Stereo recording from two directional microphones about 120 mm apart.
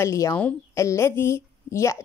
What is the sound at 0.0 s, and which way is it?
A woman's voice, 25° left (ahead or behind).